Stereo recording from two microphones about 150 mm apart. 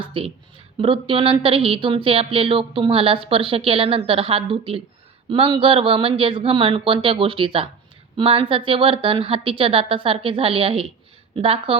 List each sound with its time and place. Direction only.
0.1 s speech: 40° right (ahead or behind)